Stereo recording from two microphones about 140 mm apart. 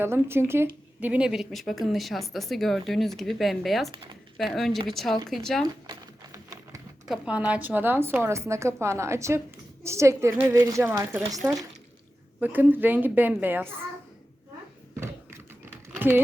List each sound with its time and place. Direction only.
0.0 s a woman's voice: 15° right (ahead or behind); by 5.6 s 5° left (ahead or behind)
5.6 s typewriter: 25° right (ahead or behind)
7.1 s a woman's voice: 10° right (ahead or behind)
12.4 s a woman's voice: 10° right (ahead or behind)
14.9 s typing: 20° right (ahead or behind)
16.0 s speech: 15° right (ahead or behind)